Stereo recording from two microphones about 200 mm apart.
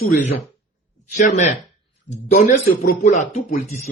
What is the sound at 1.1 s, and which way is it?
Speech, 35° left (ahead or behind).